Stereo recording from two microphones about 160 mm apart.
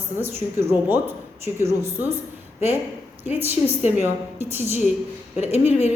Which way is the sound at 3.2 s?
15° right (ahead or behind).